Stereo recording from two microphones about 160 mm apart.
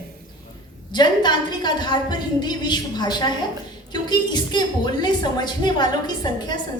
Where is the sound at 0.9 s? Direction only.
25° left (ahead or behind).